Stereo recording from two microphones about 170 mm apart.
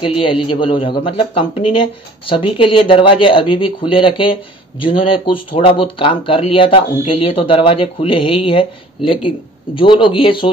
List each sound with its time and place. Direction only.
0.5 s a man's voice: 30° left (ahead or behind)